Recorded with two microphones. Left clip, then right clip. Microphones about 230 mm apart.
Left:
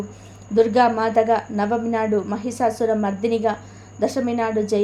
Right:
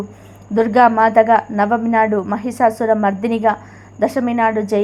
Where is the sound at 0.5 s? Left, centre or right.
Centre.